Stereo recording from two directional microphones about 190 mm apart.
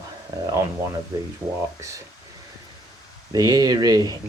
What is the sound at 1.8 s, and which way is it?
Speech, 15° right (ahead or behind).